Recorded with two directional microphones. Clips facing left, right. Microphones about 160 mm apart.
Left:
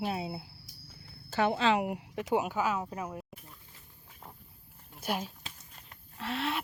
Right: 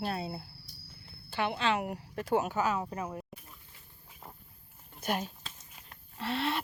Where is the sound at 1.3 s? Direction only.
40° left (ahead or behind).